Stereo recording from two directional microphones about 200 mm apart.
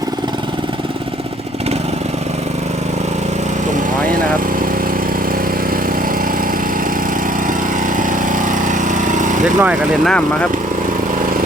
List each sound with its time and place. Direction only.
7.9 s lawn mower: 40° right (ahead or behind)
9.6 s speech: 5° right (ahead or behind)